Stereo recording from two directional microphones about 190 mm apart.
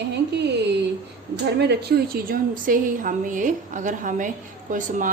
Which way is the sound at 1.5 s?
60° right (ahead or behind).